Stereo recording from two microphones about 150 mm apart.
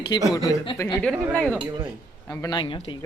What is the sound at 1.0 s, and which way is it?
Speech, 10° left (ahead or behind).